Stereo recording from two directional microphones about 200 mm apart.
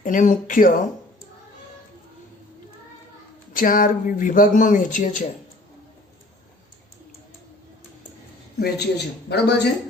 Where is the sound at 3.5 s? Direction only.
45° left (ahead or behind).